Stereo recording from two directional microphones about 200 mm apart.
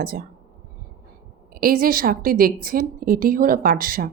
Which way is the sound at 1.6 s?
45° right (ahead or behind).